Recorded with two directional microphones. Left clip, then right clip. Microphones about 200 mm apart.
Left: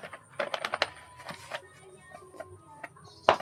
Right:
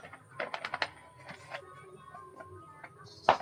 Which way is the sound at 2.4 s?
55° left (ahead or behind).